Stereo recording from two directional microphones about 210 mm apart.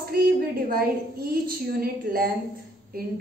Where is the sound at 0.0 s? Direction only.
45° right (ahead or behind).